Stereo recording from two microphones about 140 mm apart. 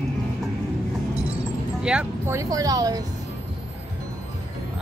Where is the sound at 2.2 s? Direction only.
25° right (ahead or behind).